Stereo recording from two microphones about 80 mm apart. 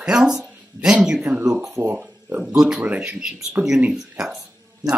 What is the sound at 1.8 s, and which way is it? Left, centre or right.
Speech, right.